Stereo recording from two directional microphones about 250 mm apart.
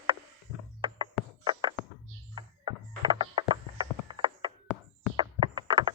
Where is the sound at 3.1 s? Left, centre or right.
Centre.